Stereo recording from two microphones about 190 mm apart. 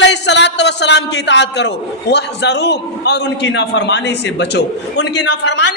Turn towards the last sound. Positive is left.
turn(degrees=65)  # may be behind; listen again after turning